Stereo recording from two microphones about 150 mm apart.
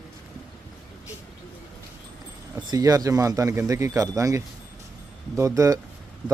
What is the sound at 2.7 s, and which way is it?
Speech, 25° right (ahead or behind).